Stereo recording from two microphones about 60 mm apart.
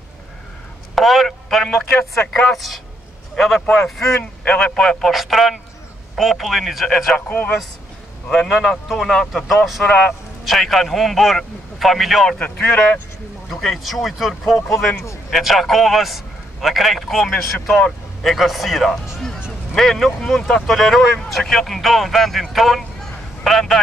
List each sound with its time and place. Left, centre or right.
0.9 s speech: centre
4.2 s speech: left
4.7 s speech: centre
7.2 s speech: left
8.3 s a man's voice: centre
9.8 s speech: left
10.4 s speech: centre
12.4 s a man's voice: left
13.5 s speech: centre